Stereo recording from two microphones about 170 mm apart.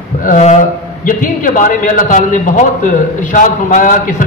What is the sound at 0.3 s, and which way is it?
A man's voice, 45° left (ahead or behind).